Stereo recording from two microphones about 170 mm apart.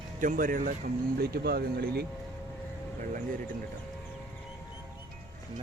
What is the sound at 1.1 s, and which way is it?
Speech, 65° right (ahead or behind).